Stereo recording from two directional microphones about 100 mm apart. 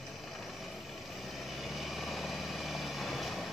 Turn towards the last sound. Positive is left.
turn(degrees=0)  # may be behind; listen again after turning